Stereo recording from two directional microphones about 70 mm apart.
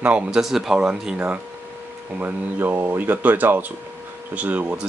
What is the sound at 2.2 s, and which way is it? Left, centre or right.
Speech, right.